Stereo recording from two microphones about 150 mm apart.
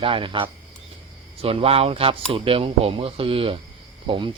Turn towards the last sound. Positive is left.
turn(degrees=-35)  # may be behind; listen again after turning